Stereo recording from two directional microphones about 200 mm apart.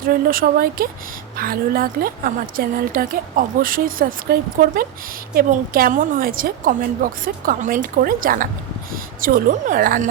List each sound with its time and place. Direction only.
0.0 s a woman's voice: 45° right (ahead or behind)